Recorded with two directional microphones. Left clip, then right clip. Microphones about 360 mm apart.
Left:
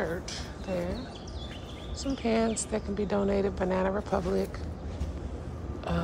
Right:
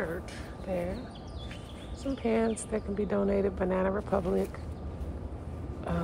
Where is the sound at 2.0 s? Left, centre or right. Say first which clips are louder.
Left 1 dB; centre.